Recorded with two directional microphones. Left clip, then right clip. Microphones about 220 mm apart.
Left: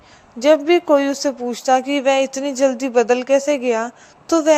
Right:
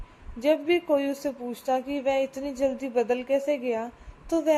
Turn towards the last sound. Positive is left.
turn(degrees=10)  # may be behind; listen again after turning